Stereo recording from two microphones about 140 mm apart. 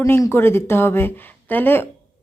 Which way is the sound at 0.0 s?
20° left (ahead or behind).